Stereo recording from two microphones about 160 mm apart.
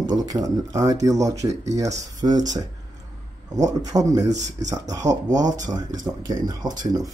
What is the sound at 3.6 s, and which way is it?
Speech, 25° right (ahead or behind).